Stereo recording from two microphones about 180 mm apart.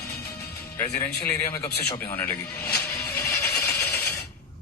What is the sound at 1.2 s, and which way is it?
A man's voice, 15° left (ahead or behind).